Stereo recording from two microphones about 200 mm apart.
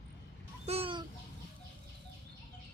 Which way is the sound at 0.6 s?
30° right (ahead or behind).